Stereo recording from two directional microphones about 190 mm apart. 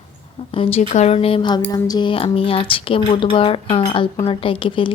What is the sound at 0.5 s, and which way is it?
Speech, 30° left (ahead or behind).